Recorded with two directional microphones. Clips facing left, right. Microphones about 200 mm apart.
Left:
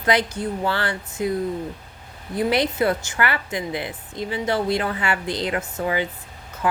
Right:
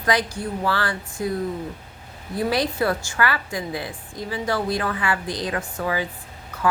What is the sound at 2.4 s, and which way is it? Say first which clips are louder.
A woman's voice: left 2 dB; 20° left (ahead or behind).